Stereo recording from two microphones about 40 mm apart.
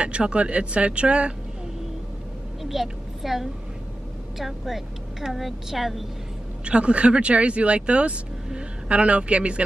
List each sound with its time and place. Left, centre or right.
0.0 s speech: right
2.6 s a woman's voice: centre
6.6 s a man's voice: right